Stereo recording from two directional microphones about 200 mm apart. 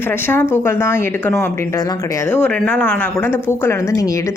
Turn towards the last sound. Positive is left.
turn(degrees=15)  # may be behind; listen again after turning